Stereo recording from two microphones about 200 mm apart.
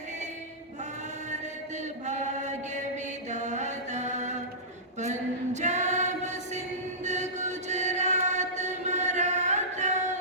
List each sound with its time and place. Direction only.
1.8 s chant: 35° right (ahead or behind)
3.2 s mantra: 35° right (ahead or behind)
5.5 s choir: 35° right (ahead or behind)
7.0 s chant: 35° right (ahead or behind)